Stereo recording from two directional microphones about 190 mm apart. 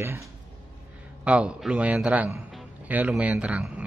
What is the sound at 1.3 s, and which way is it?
Speech, 5° right (ahead or behind).